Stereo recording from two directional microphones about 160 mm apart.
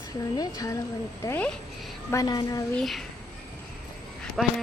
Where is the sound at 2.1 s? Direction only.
25° left (ahead or behind).